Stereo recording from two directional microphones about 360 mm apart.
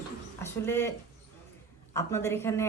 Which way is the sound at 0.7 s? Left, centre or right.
Centre.